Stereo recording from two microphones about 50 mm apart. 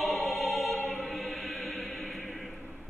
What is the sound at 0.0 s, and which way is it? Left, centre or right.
Music, centre.